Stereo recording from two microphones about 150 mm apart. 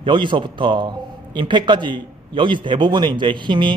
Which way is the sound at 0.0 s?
30° right (ahead or behind).